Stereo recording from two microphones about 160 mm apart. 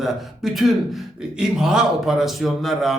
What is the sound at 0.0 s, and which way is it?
Speech, centre (ahead or behind).